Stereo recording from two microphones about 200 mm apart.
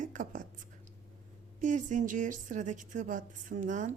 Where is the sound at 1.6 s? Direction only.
40° right (ahead or behind).